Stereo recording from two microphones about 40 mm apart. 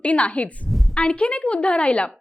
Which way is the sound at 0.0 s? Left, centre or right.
Left.